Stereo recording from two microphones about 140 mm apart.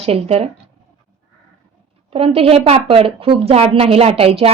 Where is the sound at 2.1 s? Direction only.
45° right (ahead or behind).